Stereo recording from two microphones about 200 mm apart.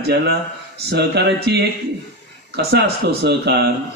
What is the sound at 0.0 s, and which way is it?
A man's voice, 60° right (ahead or behind).